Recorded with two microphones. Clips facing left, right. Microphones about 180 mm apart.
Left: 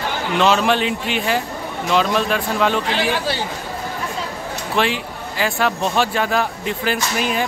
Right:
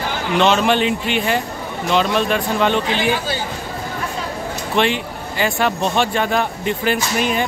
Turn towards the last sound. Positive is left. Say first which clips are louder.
# right 2 dB
turn(degrees=0)  # may be behind; listen again after turning